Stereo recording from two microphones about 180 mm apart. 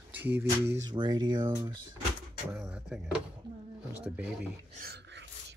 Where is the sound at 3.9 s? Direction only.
5° right (ahead or behind).